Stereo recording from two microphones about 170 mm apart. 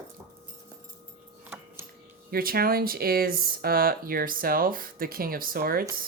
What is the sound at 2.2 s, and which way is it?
Speech, 60° right (ahead or behind).